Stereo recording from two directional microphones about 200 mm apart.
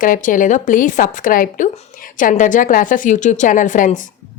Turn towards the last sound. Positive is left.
turn(degrees=40)  # may be behind; listen again after turning